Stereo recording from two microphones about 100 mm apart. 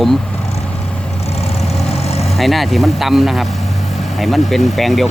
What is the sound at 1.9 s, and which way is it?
Vehicle, 90° left.